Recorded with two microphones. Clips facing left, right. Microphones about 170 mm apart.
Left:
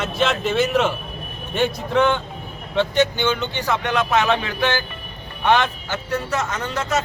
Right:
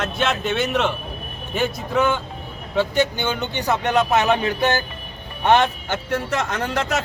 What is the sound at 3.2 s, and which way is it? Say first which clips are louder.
Speech: left 1 dB; 45° right (ahead or behind).